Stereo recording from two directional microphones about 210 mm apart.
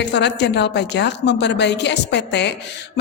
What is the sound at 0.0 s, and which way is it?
A woman's voice, 55° left (ahead or behind).